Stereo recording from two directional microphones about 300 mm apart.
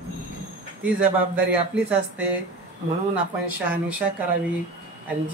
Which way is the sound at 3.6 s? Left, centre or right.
Centre.